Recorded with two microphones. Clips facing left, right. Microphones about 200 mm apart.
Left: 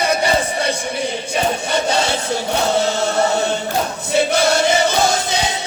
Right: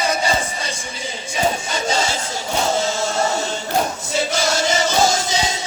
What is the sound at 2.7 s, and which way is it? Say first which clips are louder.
Chant: left 3 dB; 60° left (ahead or behind).